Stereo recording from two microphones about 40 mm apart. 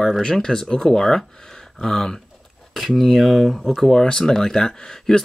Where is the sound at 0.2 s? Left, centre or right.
Centre.